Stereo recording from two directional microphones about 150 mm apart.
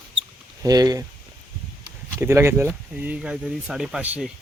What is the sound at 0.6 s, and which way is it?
Speech, 25° right (ahead or behind).